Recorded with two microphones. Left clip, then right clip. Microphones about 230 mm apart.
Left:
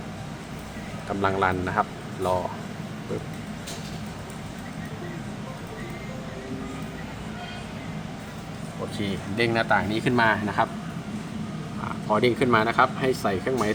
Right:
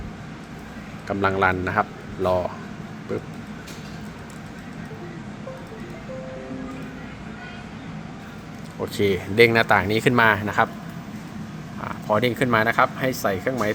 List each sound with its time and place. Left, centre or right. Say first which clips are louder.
1.0 s speech: right 3 dB; centre
9.0 s speech: right 11 dB; right
11.9 s speech: right 1 dB; right